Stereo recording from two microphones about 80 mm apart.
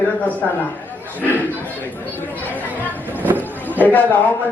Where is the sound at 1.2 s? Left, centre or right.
Left.